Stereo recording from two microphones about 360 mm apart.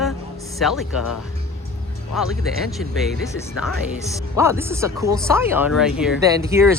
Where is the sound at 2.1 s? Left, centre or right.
Centre.